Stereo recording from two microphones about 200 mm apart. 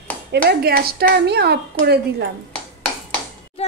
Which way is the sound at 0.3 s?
50° right (ahead or behind).